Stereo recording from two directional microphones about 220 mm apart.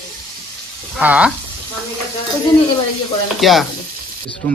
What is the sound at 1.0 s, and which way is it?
Speech, 5° right (ahead or behind).